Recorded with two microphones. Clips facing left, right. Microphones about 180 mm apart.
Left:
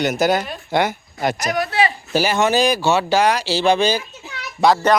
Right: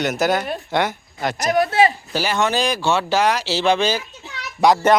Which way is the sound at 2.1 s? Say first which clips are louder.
Left 5 dB; 10° left (ahead or behind).